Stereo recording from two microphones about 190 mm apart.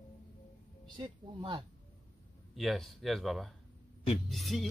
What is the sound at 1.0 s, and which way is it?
Speech, 25° right (ahead or behind).